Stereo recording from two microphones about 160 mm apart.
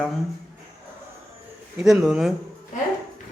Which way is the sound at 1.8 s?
5° right (ahead or behind).